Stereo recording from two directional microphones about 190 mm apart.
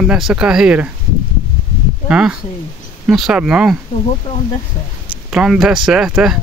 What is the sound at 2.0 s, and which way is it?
Speech, 5° right (ahead or behind).